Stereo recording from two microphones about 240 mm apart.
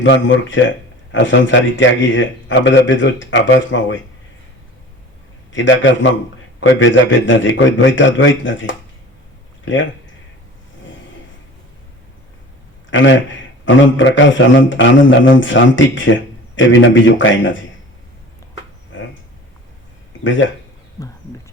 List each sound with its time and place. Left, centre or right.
0.0 s a man's voice: left
5.5 s a man's voice: left
12.9 s a man's voice: left